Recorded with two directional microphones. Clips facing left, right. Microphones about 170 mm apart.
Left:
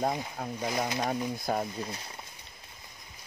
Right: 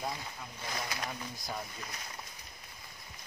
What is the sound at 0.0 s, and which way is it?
Speech, 55° left (ahead or behind).